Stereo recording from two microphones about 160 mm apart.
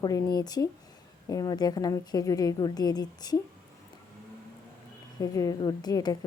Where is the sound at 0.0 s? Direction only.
25° left (ahead or behind).